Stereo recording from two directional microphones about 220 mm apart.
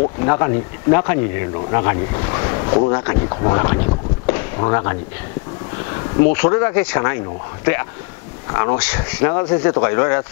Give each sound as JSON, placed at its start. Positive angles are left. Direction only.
{"t": 0.2, "sound": "speech", "side_deg": 20}
{"t": 4.3, "sound": "a sound", "side_deg": 20}
{"t": 6.3, "sound": "speech", "side_deg": 15}
{"t": 8.5, "sound": "speech", "side_deg": 20}
{"t": 8.7, "sound": "speech", "side_deg": 10}
{"t": 9.3, "sound": "speech", "side_deg": 20}